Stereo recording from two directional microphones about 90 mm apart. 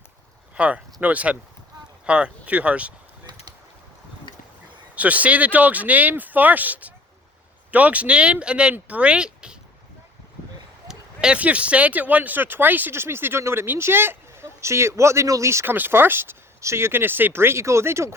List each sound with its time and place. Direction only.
0.5 s speech: 15° right (ahead or behind)
4.9 s speech: 15° right (ahead or behind)
10.8 s speech: 10° right (ahead or behind); by 18.1 s 30° right (ahead or behind)